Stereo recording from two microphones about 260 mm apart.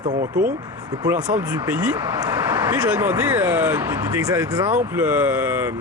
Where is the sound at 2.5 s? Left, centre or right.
Centre.